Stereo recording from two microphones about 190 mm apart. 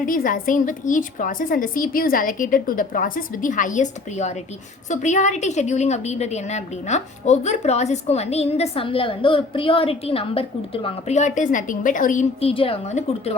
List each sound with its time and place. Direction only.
0.0 s a woman's voice: 45° left (ahead or behind)